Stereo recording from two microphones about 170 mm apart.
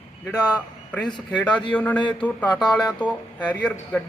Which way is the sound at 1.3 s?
10° left (ahead or behind).